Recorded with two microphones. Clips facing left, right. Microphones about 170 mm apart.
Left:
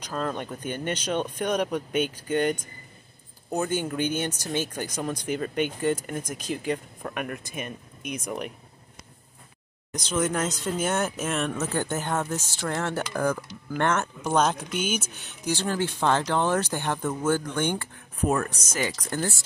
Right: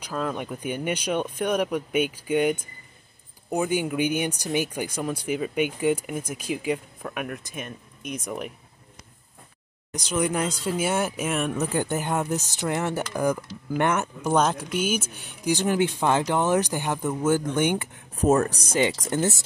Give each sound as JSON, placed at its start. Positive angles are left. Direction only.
{"t": 0.0, "sound": "speech", "side_deg": -5}
{"t": 10.0, "sound": "speech", "side_deg": -15}
{"t": 18.1, "sound": "speech", "side_deg": -40}